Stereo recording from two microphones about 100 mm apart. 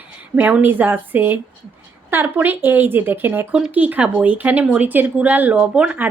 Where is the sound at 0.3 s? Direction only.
15° right (ahead or behind).